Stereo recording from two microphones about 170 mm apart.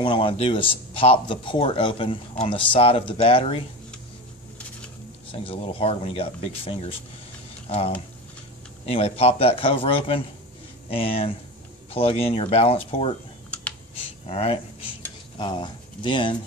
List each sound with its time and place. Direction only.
0.0 s a man's voice: 30° left (ahead or behind)
5.3 s a man's voice: 35° left (ahead or behind)
14.2 s cutlery: 35° left (ahead or behind)